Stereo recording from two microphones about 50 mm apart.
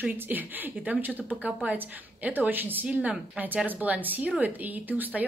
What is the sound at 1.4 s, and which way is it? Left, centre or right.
Speech, right.